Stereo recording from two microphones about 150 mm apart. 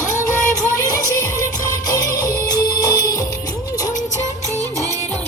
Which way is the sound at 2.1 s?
75° left (ahead or behind).